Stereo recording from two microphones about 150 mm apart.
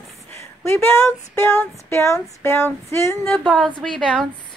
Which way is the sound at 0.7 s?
15° left (ahead or behind).